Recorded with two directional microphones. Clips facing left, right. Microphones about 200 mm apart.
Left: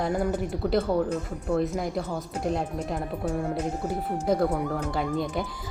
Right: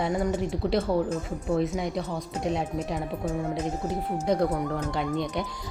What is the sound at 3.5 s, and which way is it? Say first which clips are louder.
Speech: even; 20° right (ahead or behind).